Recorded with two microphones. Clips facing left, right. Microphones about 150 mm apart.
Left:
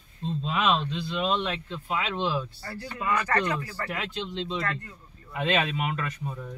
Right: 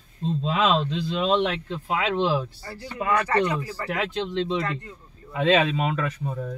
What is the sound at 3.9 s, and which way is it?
Speech, 90° right.